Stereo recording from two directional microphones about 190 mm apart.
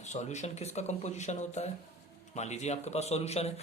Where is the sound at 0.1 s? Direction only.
35° left (ahead or behind).